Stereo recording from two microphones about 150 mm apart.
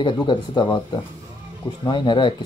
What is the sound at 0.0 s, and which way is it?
Speech, 30° left (ahead or behind).